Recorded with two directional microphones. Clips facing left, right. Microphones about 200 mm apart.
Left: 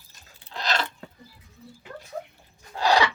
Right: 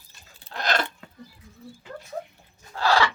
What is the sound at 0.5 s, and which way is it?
Speech, 50° right (ahead or behind).